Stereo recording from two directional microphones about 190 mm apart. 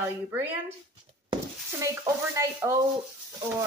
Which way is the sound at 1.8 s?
15° right (ahead or behind).